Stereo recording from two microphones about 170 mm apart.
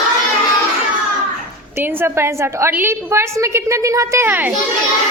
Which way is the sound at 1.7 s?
10° right (ahead or behind).